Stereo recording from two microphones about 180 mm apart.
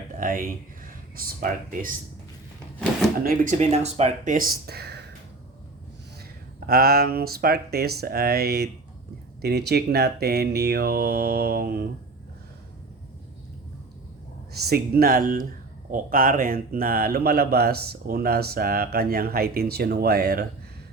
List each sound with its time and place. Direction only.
0.2 s speech: 50° right (ahead or behind)
3.2 s speech: 45° right (ahead or behind)
4.4 s speech: 55° right (ahead or behind)
6.7 s speech: 55° right (ahead or behind)
14.5 s speech: 60° right (ahead or behind)